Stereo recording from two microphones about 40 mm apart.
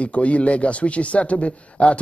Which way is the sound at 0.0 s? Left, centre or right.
Left.